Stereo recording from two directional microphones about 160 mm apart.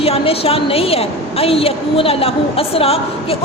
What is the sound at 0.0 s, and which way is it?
A woman's voice, 35° left (ahead or behind).